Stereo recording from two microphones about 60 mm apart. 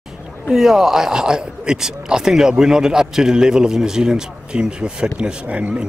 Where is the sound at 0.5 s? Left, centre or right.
Centre.